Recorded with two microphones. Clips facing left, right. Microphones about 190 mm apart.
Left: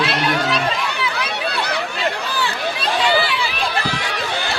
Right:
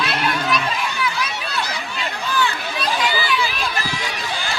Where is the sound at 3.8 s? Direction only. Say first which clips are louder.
Left 3 dB; 65° left (ahead or behind).